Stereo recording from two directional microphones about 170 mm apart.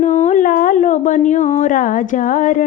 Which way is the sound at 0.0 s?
45° left (ahead or behind).